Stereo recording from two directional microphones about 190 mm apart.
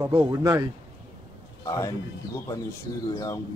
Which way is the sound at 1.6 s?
15° left (ahead or behind).